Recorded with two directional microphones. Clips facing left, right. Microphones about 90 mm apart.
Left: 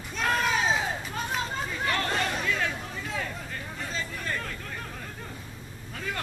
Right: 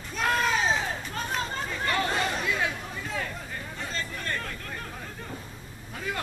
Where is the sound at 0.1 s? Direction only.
Centre (ahead or behind).